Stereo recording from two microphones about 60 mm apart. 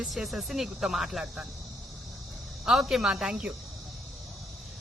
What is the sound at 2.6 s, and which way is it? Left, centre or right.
Speech, centre.